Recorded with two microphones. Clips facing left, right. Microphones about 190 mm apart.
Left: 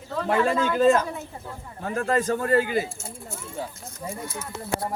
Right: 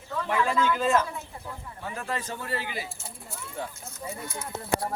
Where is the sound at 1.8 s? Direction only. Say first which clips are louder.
Left 10 dB; 50° left (ahead or behind).